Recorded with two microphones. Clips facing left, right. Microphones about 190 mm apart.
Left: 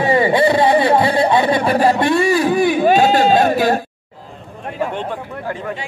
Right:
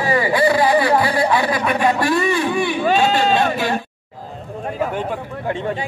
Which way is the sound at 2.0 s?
25° left (ahead or behind).